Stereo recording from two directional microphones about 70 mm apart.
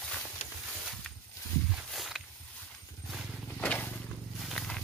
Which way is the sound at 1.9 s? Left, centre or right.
Centre.